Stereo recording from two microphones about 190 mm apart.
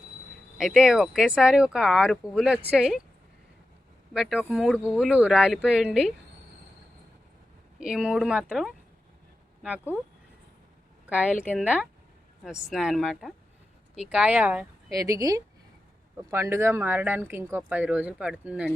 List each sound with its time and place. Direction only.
0.6 s speech: 5° right (ahead or behind)
4.1 s speech: 5° right (ahead or behind)
7.8 s speech: 5° right (ahead or behind)
11.0 s speech: 5° right (ahead or behind)